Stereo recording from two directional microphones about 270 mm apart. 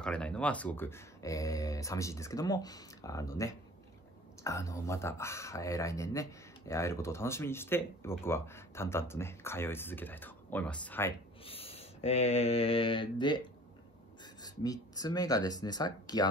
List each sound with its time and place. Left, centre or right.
0.0 s speech: centre
11.4 s mantra: left
14.2 s speech: centre